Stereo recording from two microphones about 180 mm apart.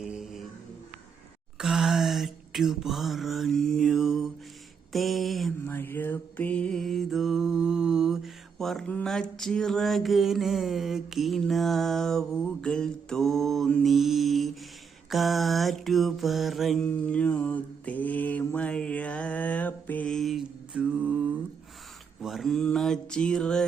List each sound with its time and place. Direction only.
0.0 s music: centre (ahead or behind)
1.5 s a sound: 5° right (ahead or behind)
5.6 s mantra: 10° left (ahead or behind); by 21.2 s 10° right (ahead or behind)
22.2 s mantra: centre (ahead or behind)